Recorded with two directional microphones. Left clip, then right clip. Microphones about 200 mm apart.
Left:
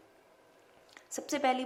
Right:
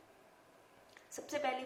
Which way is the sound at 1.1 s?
55° left (ahead or behind).